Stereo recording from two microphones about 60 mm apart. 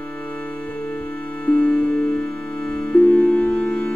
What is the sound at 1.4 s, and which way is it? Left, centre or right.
Music, centre.